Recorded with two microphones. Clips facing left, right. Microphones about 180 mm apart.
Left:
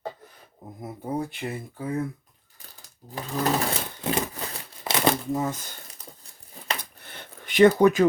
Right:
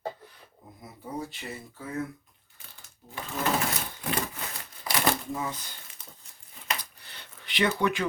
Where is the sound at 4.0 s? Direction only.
30° left (ahead or behind).